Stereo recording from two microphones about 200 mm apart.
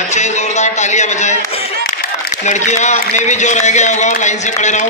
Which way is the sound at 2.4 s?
35° left (ahead or behind).